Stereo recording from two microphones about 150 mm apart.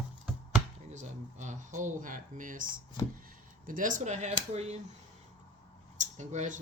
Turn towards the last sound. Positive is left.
turn(degrees=-55)  # may be behind; listen again after turning